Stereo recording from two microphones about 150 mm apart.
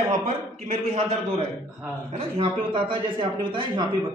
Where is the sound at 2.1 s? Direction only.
35° right (ahead or behind).